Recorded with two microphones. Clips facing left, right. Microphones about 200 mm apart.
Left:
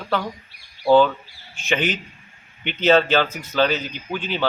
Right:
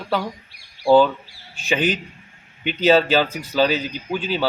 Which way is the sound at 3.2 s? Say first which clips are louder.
Right 2 dB; 35° right (ahead or behind).